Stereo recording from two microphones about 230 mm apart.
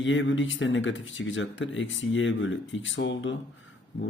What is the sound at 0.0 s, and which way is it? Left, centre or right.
Speech, left.